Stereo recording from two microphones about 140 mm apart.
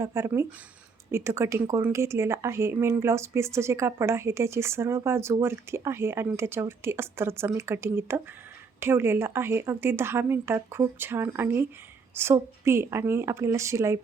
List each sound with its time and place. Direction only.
0.0 s speech: 20° right (ahead or behind)